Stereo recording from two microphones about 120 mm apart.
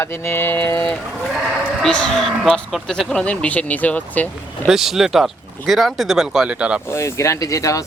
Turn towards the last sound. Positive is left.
turn(degrees=25)  # may be behind; listen again after turning